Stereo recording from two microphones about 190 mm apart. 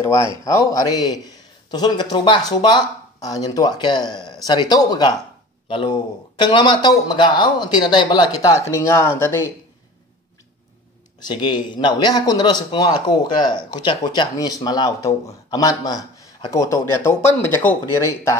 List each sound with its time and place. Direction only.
0.0 s a man's voice: 15° left (ahead or behind)
11.2 s a man's voice: 25° left (ahead or behind)